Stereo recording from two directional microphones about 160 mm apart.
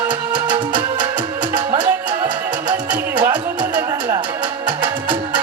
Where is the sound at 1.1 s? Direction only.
10° right (ahead or behind).